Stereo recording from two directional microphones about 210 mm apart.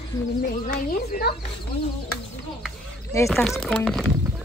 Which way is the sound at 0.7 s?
40° left (ahead or behind).